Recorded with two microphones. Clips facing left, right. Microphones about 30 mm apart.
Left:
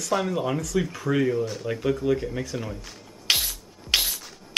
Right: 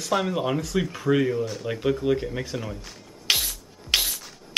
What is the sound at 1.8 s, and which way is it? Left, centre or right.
Speech, centre.